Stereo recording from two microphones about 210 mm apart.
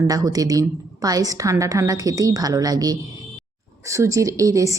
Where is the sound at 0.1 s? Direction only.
15° right (ahead or behind).